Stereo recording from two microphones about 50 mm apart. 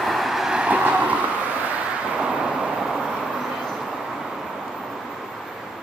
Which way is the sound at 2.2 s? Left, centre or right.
Centre.